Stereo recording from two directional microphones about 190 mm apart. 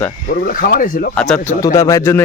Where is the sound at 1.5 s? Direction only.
15° left (ahead or behind).